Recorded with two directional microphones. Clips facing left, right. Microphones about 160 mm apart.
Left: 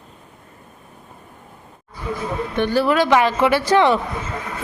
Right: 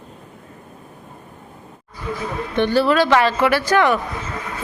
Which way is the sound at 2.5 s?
10° left (ahead or behind).